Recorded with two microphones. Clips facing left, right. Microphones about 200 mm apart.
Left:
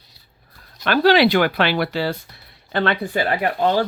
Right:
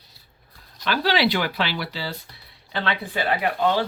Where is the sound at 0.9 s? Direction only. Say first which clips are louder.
Left 7 dB; 55° left (ahead or behind).